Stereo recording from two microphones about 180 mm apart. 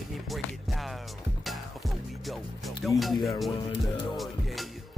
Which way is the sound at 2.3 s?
Centre (ahead or behind).